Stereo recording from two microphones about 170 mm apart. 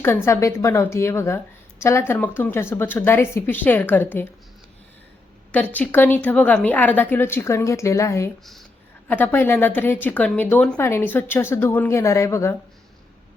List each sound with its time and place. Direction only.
0.3 s a woman's voice: 15° left (ahead or behind)
5.7 s a woman's voice: 10° left (ahead or behind)